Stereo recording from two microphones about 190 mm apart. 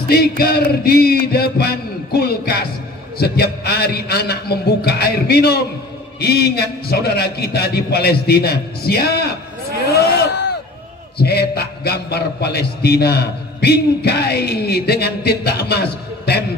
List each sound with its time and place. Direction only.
0.4 s a man's voice: 55° left (ahead or behind)